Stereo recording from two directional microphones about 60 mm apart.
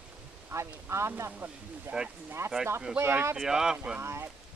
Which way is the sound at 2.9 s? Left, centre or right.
Centre.